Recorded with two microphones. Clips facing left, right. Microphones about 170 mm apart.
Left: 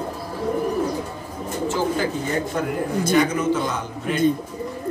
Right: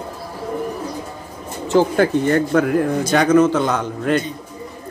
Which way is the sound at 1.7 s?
65° right (ahead or behind).